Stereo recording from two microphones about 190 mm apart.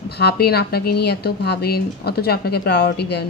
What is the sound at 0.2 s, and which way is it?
Speech, 55° left (ahead or behind).